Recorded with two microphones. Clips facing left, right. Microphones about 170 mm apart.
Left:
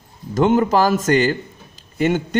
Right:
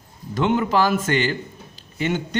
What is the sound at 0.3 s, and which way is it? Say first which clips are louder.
A man's voice: left 4 dB; 40° left (ahead or behind).